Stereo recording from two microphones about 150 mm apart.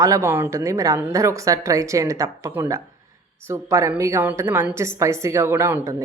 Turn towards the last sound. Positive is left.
turn(degrees=-20)  # may be behind; listen again after turning